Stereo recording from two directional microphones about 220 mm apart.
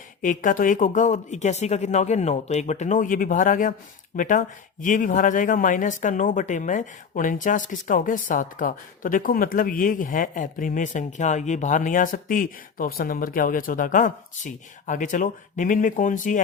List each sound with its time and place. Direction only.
0.2 s speech: 35° left (ahead or behind)